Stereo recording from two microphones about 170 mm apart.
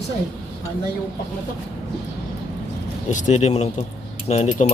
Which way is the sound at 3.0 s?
45° left (ahead or behind).